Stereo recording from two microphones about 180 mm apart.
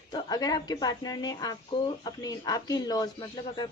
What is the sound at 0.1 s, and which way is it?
A woman's voice, 20° left (ahead or behind).